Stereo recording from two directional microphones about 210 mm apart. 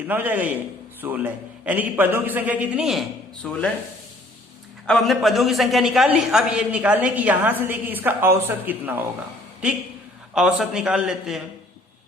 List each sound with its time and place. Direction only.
0.1 s a man's voice: 10° right (ahead or behind)
4.9 s a man's voice: centre (ahead or behind)
10.3 s a man's voice: centre (ahead or behind)